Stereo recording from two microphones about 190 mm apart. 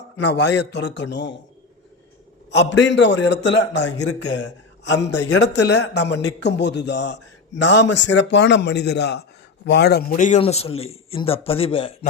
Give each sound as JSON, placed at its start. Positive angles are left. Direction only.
{"t": 0.2, "sound": "a man's voice", "side_deg": 65}
{"t": 2.5, "sound": "a man's voice", "side_deg": 70}
{"t": 10.2, "sound": "a man's voice", "side_deg": 35}